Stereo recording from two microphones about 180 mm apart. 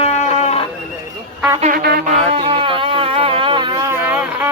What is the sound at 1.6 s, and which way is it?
Music, 55° right (ahead or behind).